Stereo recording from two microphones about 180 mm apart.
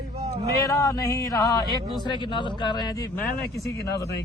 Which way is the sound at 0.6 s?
20° left (ahead or behind).